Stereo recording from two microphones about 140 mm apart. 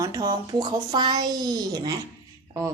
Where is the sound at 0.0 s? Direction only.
25° right (ahead or behind).